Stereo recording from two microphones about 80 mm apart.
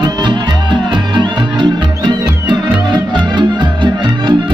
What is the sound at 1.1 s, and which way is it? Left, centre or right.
Music, right.